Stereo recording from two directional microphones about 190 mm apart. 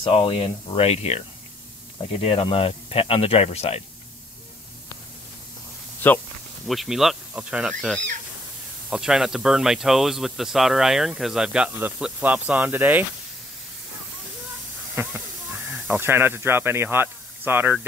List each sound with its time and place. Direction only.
0.0 s speech: 30° left (ahead or behind)
2.2 s speech: 30° left (ahead or behind)
6.0 s speech: 10° left (ahead or behind); by 13.0 s 10° right (ahead or behind)
15.7 s speech: 10° right (ahead or behind)